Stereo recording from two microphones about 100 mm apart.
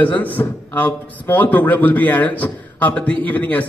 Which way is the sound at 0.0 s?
15° left (ahead or behind).